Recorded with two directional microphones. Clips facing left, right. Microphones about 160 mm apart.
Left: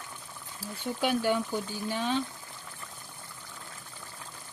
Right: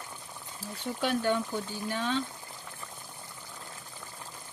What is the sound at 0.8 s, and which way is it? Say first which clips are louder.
Speech: left 1 dB; 5° left (ahead or behind).